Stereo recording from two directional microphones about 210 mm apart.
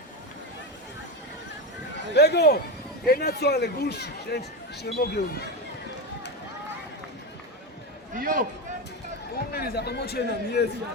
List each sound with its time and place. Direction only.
2.1 s a man's voice: 50° left (ahead or behind)
8.1 s a man's voice: 40° right (ahead or behind)
9.5 s a man's voice: 50° left (ahead or behind)